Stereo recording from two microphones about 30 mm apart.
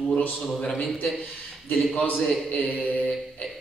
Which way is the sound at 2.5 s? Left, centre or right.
Left.